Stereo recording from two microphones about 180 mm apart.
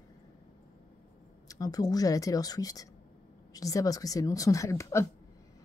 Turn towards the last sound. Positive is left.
turn(degrees=15)  # may be behind; listen again after turning